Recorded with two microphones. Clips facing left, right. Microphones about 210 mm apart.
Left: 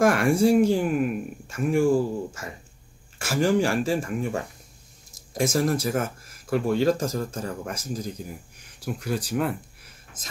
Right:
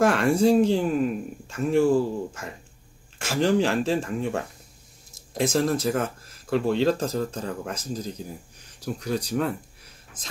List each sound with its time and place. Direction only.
0.0 s speech: 10° left (ahead or behind)
5.3 s speech: 10° left (ahead or behind)